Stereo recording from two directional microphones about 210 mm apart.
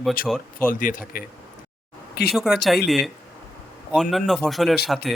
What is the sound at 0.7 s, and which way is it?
Speech, 40° left (ahead or behind).